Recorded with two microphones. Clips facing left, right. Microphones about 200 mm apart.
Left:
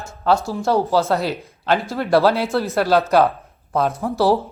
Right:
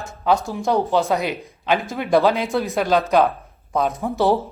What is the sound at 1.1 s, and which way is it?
Speech, 15° right (ahead or behind).